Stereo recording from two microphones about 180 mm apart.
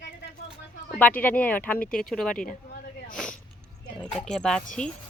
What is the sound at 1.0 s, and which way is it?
Speech, 10° left (ahead or behind).